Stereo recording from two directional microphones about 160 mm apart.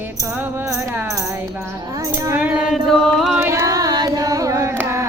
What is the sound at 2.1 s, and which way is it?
Music, 10° right (ahead or behind).